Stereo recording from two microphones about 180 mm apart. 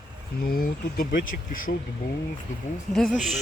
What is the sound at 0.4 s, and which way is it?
Speech, 55° left (ahead or behind).